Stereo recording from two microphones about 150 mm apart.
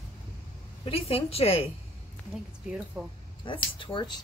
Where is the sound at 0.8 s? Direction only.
40° left (ahead or behind).